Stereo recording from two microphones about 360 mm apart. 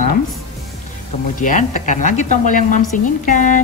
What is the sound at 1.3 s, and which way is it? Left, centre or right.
A woman's voice, left.